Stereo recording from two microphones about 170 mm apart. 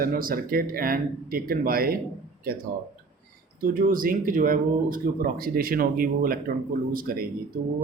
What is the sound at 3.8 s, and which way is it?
A man's voice, 55° right (ahead or behind).